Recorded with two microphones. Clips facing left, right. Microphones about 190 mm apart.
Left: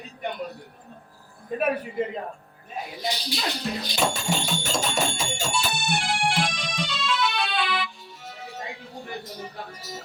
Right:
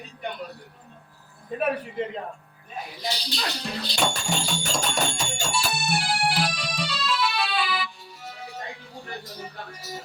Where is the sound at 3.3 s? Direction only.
15° left (ahead or behind).